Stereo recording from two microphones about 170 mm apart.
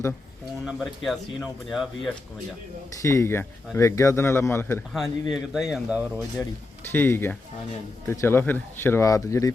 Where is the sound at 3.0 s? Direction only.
15° left (ahead or behind).